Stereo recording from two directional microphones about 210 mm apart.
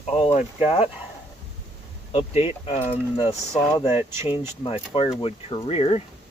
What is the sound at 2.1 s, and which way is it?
Speech, 25° left (ahead or behind).